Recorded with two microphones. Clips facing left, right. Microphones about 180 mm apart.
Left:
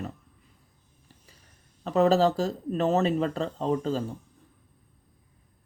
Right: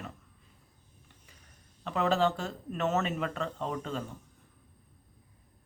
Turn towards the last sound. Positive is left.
turn(degrees=35)  # may be behind; listen again after turning